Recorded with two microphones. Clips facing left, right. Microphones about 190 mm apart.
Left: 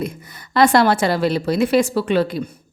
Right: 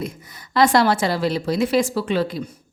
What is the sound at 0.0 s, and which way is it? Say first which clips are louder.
A woman's voice: left 3 dB; 60° left (ahead or behind).